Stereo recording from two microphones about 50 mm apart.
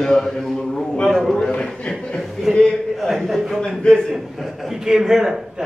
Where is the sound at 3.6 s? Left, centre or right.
Centre.